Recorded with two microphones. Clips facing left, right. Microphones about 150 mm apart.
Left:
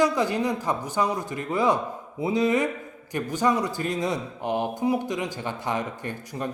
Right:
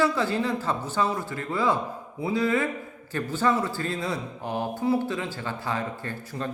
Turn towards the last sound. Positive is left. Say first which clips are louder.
# left 1 dB
turn(degrees=15)  # may be behind; listen again after turning